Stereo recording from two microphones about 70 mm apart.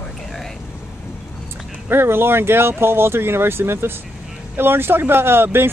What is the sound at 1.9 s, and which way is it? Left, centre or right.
Speech, right.